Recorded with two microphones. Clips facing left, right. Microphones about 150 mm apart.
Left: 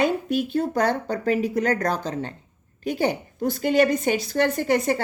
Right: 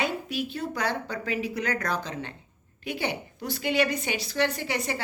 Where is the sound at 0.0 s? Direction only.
50° left (ahead or behind).